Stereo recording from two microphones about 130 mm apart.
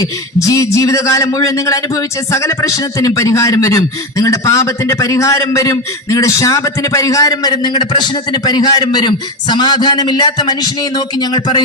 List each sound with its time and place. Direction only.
0.0 s a man's voice: 25° left (ahead or behind)